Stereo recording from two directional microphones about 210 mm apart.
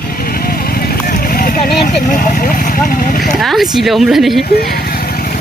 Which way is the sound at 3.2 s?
Centre (ahead or behind).